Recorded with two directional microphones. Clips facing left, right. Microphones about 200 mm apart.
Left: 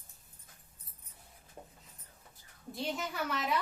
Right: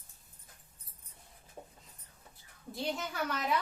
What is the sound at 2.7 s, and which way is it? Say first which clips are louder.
Speech: even; centre (ahead or behind).